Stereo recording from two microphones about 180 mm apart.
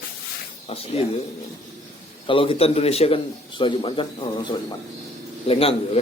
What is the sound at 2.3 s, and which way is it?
A man's voice, 30° left (ahead or behind).